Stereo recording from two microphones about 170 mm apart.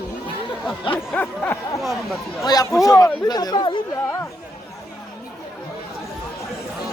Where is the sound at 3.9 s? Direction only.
15° left (ahead or behind).